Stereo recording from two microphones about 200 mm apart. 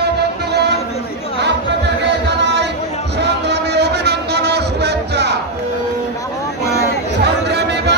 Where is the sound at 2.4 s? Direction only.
60° right (ahead or behind).